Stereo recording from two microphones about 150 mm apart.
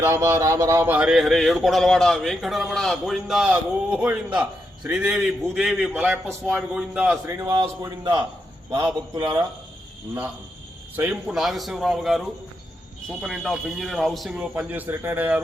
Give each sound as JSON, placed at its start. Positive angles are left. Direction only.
{"t": 0.0, "sound": "speech", "side_deg": -20}
{"t": 7.4, "sound": "a man's voice", "side_deg": -30}
{"t": 10.9, "sound": "speech", "side_deg": -10}